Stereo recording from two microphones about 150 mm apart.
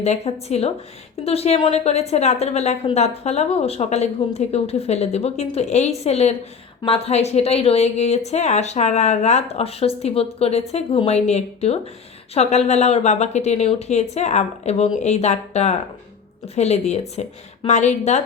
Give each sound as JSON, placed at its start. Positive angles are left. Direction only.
{"t": 0.0, "sound": "speech", "side_deg": 45}